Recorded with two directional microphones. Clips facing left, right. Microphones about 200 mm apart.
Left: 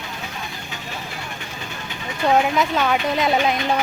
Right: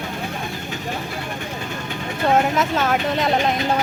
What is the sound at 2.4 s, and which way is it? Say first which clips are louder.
Speech: even; centre (ahead or behind).